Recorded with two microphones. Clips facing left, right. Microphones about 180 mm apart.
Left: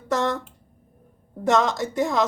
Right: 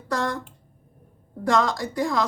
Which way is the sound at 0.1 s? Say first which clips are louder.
Left 3 dB; 20° left (ahead or behind).